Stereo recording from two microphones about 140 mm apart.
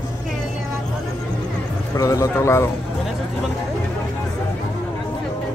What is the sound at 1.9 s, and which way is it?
Speech, 20° left (ahead or behind).